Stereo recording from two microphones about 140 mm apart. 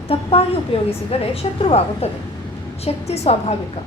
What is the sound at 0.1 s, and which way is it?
A woman's voice, 45° left (ahead or behind).